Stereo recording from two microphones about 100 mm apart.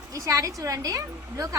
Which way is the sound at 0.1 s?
35° right (ahead or behind).